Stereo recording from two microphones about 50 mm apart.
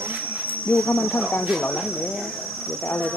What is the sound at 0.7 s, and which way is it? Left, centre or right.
Speech, centre.